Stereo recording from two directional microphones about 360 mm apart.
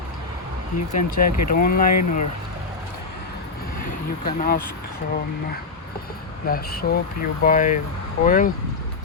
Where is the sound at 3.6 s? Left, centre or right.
Left.